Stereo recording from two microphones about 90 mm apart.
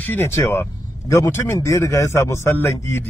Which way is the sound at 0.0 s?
25° left (ahead or behind).